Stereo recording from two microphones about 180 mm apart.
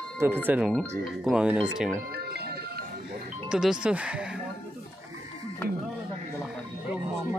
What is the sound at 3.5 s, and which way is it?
Speech, 5° right (ahead or behind).